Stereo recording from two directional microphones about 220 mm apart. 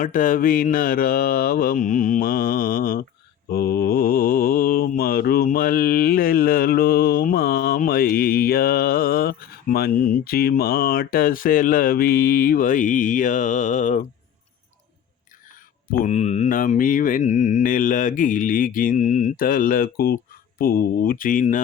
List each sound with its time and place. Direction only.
0.0 s mantra: 35° left (ahead or behind)
15.9 s mantra: 35° left (ahead or behind)